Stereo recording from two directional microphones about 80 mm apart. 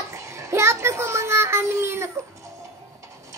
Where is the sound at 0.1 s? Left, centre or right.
Right.